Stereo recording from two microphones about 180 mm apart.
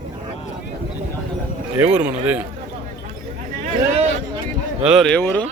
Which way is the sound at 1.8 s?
10° right (ahead or behind).